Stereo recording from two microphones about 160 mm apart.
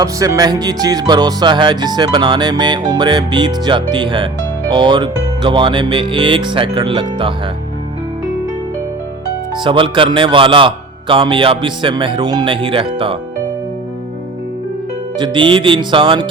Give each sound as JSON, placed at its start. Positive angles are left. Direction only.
{"t": 0.0, "sound": "music", "side_deg": -20}
{"t": 3.9, "sound": "a man's voice", "side_deg": -30}
{"t": 9.6, "sound": "a man's voice", "side_deg": -30}
{"t": 15.2, "sound": "a man's voice", "side_deg": -30}